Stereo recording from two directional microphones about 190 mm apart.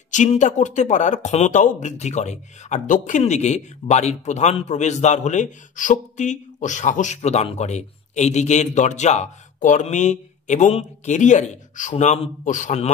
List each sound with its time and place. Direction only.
0.1 s speech: 40° left (ahead or behind)